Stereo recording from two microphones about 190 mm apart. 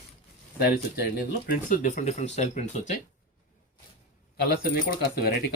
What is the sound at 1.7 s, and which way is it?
Speech, 40° left (ahead or behind).